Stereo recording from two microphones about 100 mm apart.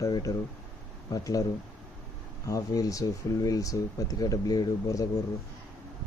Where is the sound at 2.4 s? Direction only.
35° left (ahead or behind).